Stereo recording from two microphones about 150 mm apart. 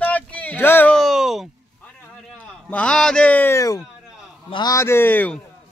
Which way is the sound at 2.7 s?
10° left (ahead or behind).